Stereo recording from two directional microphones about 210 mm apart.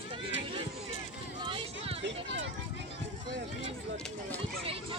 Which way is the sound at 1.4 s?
25° right (ahead or behind).